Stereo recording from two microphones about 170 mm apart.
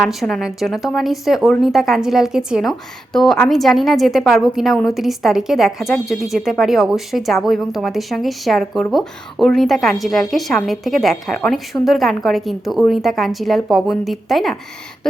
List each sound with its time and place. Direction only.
0.1 s a woman's voice: centre (ahead or behind)